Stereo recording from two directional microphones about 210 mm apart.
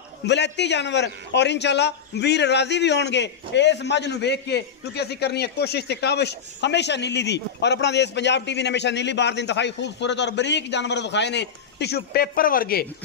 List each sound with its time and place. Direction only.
0.2 s a man's voice: 55° left (ahead or behind)